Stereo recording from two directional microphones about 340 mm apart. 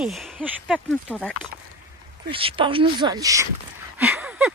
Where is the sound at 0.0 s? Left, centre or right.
Centre.